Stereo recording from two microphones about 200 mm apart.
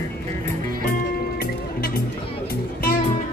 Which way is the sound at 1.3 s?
45° left (ahead or behind).